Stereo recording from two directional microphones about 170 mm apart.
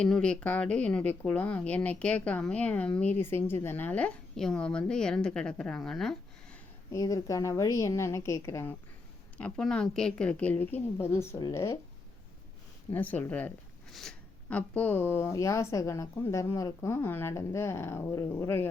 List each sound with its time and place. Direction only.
0.0 s speech: 5° left (ahead or behind)
6.9 s speech: 20° left (ahead or behind)
9.4 s speech: 5° left (ahead or behind)
12.9 s speech: 10° left (ahead or behind)